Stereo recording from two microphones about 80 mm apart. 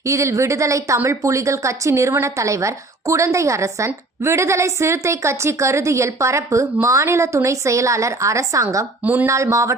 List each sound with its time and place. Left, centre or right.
0.0 s a woman's voice: right